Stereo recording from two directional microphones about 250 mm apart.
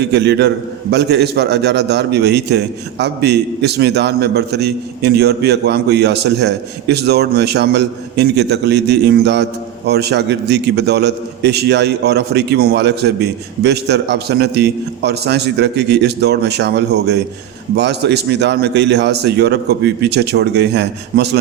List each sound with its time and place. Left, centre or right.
0.0 s a man's voice: right